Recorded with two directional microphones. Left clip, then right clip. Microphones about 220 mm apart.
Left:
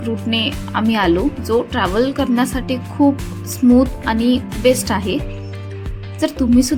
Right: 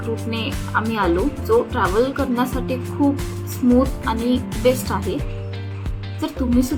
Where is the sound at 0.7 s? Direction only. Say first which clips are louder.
Left 3 dB; 35° left (ahead or behind).